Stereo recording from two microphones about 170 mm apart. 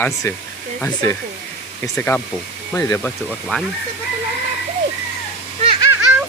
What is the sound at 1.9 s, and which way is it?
Speech, 10° left (ahead or behind).